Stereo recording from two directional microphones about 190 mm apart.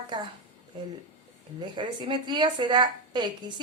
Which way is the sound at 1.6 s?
25° right (ahead or behind).